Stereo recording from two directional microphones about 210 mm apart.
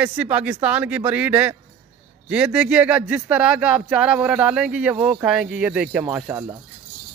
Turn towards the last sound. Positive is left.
turn(degrees=-10)  # may be behind; listen again after turning